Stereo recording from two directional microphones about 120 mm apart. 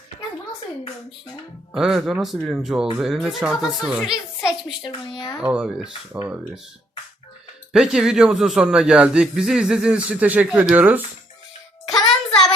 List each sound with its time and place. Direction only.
1.7 s speech: 5° right (ahead or behind)
4.8 s speech: 40° left (ahead or behind)
5.4 s speech: 10° right (ahead or behind)
7.7 s speech: 5° right (ahead or behind)
11.9 s child singing: 5° left (ahead or behind)